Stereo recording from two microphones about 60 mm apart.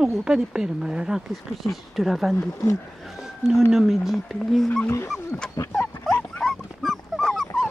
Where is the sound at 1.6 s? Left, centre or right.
Centre.